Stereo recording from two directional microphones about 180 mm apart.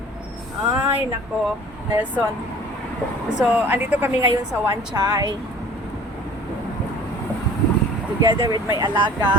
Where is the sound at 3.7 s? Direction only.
10° right (ahead or behind).